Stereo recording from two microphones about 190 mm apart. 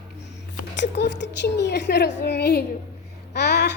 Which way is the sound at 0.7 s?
65° left (ahead or behind).